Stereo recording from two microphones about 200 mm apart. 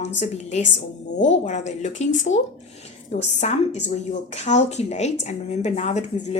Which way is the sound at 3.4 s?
35° left (ahead or behind).